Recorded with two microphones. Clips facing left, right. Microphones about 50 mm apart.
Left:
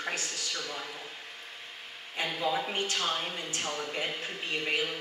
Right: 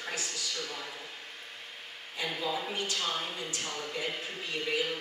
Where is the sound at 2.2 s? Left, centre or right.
Left.